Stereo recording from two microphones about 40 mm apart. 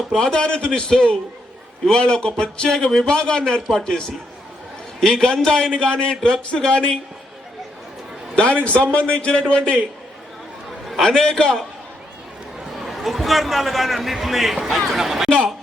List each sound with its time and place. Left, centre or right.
0.2 s a man's voice: left
4.9 s a man's voice: centre
8.4 s a man's voice: left
11.0 s a man's voice: centre
12.7 s a man's voice: centre